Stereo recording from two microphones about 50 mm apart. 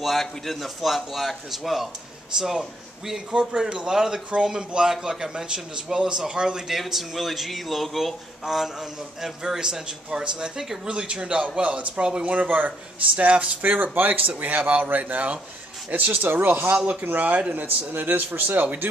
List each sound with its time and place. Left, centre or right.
0.0 s a man's voice: centre
6.8 s speech: centre; by 18.9 s right